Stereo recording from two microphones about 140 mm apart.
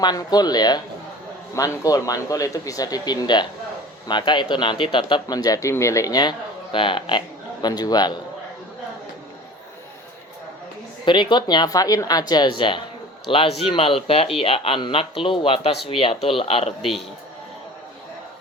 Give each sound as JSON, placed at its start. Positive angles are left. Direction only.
{"t": 0.0, "sound": "speech", "side_deg": 30}
{"t": 11.0, "sound": "speech", "side_deg": 35}